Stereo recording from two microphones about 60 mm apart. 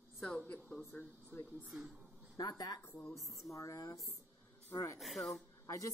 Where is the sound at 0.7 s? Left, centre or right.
Left.